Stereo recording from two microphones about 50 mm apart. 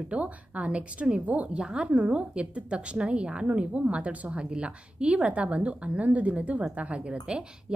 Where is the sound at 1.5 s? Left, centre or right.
Centre.